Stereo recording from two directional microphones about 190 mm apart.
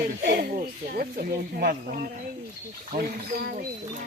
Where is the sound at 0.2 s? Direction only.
55° right (ahead or behind).